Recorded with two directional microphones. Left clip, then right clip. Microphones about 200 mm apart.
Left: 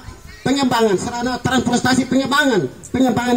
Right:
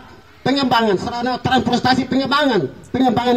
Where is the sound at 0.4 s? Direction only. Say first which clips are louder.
Even; 35° left (ahead or behind).